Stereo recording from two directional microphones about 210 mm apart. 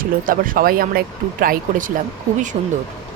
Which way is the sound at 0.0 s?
40° right (ahead or behind).